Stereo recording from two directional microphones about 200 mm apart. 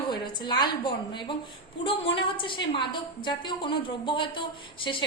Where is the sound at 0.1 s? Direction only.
20° left (ahead or behind).